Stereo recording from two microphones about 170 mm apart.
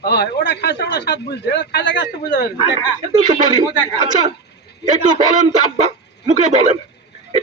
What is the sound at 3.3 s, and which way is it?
Speech, 25° right (ahead or behind).